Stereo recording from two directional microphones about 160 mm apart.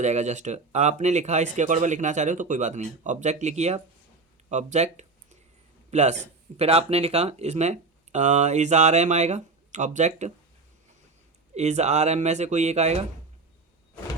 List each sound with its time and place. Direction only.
0.0 s speech: 45° right (ahead or behind)
4.4 s a sound: 45° right (ahead or behind)
5.9 s speech: 45° right (ahead or behind)
11.5 s speech: 45° right (ahead or behind)